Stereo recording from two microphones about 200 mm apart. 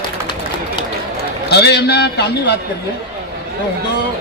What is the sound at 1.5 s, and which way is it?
A man's voice, 55° left (ahead or behind).